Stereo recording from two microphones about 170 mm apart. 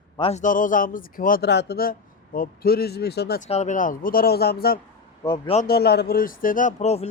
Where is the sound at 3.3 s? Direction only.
40° left (ahead or behind); by 4.8 s 65° left (ahead or behind).